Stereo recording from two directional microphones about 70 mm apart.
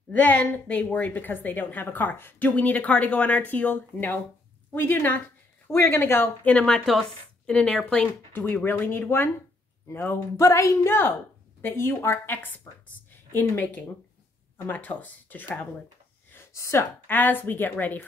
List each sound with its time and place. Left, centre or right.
0.2 s a woman's voice: left
5.7 s speech: left
6.6 s a woman's voice: centre
8.3 s speech: left
13.1 s a sound: left
14.7 s a woman's voice: left
16.5 s speech: left
17.1 s a woman's voice: left